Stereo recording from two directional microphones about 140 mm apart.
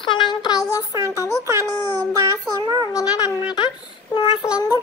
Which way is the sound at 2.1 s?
25° right (ahead or behind).